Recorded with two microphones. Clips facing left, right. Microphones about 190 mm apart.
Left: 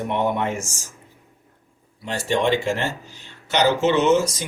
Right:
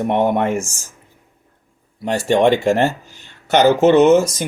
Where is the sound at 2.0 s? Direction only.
55° right (ahead or behind).